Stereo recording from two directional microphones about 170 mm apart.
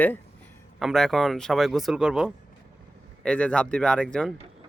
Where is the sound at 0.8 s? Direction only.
Centre (ahead or behind).